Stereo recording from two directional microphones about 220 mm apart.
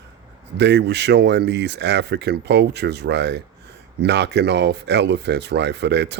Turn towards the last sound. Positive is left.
turn(degrees=-50)  # may be behind; listen again after turning